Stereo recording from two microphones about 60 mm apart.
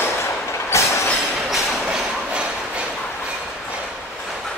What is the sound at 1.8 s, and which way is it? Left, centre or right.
Train, centre.